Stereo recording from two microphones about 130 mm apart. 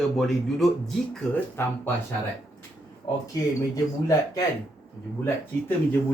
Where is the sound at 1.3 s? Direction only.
15° left (ahead or behind).